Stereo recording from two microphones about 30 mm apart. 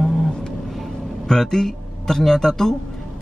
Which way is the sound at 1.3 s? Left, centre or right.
Centre.